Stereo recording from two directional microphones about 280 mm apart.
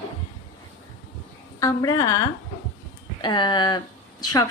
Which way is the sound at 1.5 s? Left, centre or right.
Centre.